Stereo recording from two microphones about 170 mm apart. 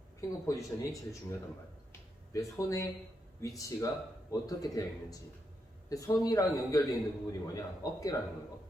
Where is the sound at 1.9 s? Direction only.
20° left (ahead or behind).